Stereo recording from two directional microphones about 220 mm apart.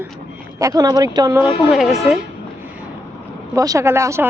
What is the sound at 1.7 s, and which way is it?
Speech, centre (ahead or behind).